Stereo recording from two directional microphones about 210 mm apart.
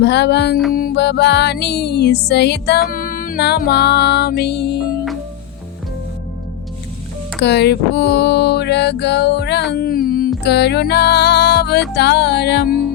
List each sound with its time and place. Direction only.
0.0 s music: 55° left (ahead or behind)
0.7 s music: 45° left (ahead or behind)
2.9 s music: 40° left (ahead or behind)
7.4 s a sound: 55° left (ahead or behind)
9.7 s music: 45° left (ahead or behind)